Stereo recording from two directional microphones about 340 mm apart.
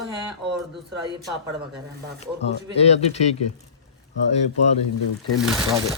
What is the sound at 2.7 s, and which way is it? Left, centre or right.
Speech, centre.